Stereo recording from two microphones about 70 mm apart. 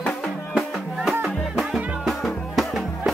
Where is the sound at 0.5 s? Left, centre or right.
Centre.